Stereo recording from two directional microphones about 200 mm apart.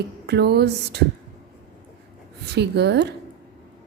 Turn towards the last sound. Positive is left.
turn(degrees=-55)  # may be behind; listen again after turning